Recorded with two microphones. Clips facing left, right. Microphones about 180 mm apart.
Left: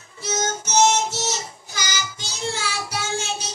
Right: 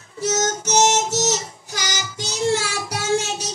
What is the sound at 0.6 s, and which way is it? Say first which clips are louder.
Music: even; 80° right.